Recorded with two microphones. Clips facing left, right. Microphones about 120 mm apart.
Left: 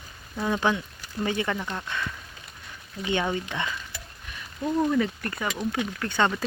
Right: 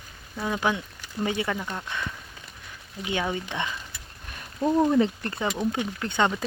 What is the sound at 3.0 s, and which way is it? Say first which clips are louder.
Speech: left 2 dB; 10° right (ahead or behind).